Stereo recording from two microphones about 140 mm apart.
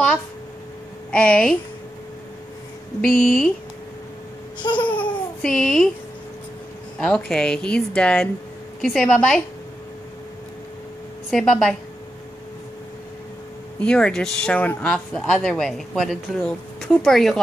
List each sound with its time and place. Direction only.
1.1 s a woman's voice: 5° left (ahead or behind)
3.0 s speech: centre (ahead or behind)
4.6 s babbling: 35° left (ahead or behind)
4.8 s babbling: 10° left (ahead or behind)
7.0 s speech: 5° left (ahead or behind)
11.2 s speech: centre (ahead or behind)
13.7 s speech: 5° left (ahead or behind)